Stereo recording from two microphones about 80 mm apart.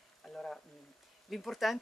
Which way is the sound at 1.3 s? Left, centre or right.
Centre.